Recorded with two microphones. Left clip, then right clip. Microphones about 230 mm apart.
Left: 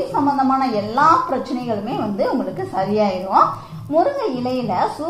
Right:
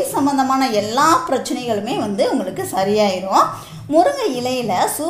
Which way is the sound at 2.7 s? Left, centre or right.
Right.